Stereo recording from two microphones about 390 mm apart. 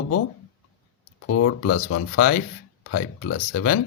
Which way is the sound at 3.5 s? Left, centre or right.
Left.